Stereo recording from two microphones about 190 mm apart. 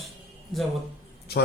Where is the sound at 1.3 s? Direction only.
55° left (ahead or behind).